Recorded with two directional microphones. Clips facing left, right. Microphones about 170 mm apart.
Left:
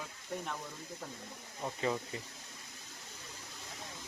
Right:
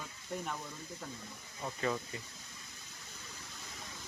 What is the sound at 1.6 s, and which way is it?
Speech, 15° left (ahead or behind).